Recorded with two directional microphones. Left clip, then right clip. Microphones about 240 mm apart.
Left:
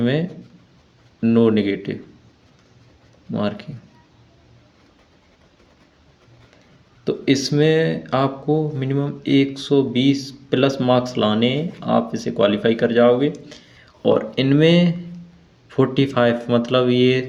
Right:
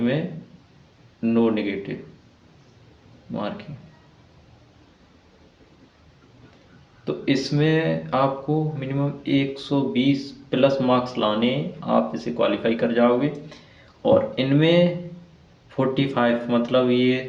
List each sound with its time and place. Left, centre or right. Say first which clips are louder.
1.2 s speech: left 5 dB; left
3.3 s speech: left 5 dB; left
7.0 s speech: left 4 dB; left